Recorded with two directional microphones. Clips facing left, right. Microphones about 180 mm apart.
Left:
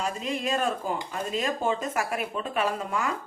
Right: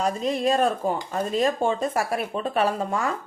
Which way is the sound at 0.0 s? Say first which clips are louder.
Right 6 dB; 35° right (ahead or behind).